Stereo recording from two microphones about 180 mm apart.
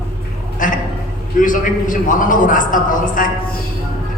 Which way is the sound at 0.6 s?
50° left (ahead or behind).